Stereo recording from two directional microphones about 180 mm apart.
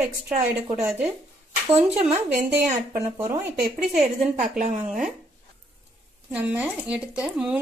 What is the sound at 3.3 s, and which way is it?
Speech, 10° right (ahead or behind).